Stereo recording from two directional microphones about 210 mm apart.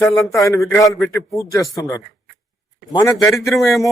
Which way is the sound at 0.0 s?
15° left (ahead or behind).